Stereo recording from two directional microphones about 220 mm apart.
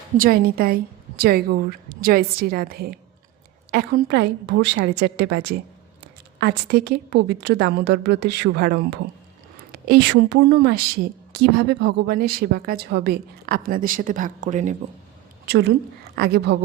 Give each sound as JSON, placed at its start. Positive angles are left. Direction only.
{"t": 0.2, "sound": "a woman's voice", "side_deg": -40}
{"t": 15.4, "sound": "a woman's voice", "side_deg": -50}